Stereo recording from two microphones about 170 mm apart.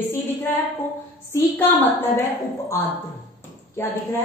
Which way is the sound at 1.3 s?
15° left (ahead or behind).